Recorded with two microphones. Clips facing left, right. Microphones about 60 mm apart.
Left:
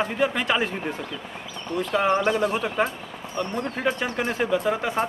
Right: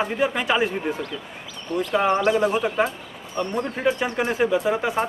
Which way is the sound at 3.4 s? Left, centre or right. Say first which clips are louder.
Right 2 dB; right.